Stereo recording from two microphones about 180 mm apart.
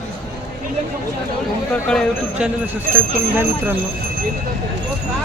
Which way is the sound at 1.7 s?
5° left (ahead or behind).